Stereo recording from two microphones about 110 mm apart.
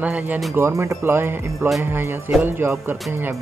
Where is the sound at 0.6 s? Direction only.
25° right (ahead or behind).